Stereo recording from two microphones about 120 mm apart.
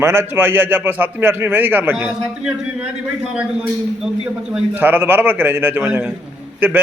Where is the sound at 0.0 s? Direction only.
20° right (ahead or behind).